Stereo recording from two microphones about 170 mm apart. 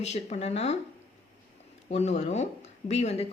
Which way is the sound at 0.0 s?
40° left (ahead or behind).